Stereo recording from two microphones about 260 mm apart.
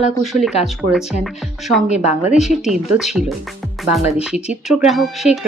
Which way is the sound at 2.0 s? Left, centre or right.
Right.